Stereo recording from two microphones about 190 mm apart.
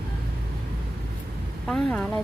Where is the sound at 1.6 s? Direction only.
5° left (ahead or behind).